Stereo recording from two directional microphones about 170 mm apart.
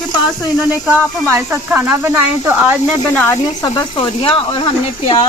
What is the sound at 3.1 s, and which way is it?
Speech, 15° left (ahead or behind).